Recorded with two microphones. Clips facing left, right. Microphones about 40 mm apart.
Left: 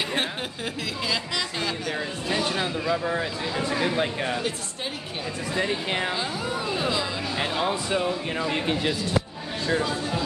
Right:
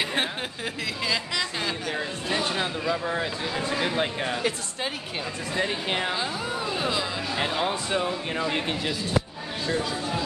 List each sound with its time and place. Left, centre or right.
1.0 s speech: centre
5.5 s speech: centre
9.7 s speech: centre